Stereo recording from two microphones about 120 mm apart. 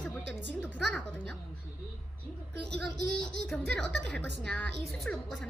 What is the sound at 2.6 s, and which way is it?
A woman's voice, 10° left (ahead or behind).